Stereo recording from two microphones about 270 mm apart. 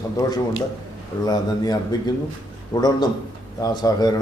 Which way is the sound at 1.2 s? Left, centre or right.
Centre.